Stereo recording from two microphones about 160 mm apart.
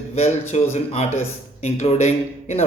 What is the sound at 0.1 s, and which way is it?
Speech, 45° left (ahead or behind).